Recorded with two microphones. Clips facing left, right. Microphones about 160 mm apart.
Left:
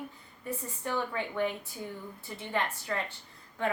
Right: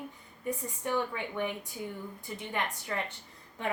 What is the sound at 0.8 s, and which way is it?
A woman's voice, 15° right (ahead or behind).